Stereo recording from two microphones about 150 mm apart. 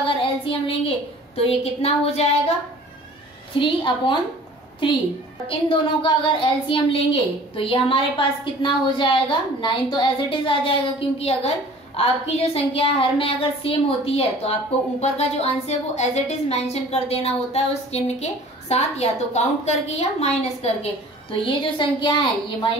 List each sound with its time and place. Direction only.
0.5 s a woman's voice: 40° left (ahead or behind)
3.5 s a woman's voice: 35° left (ahead or behind)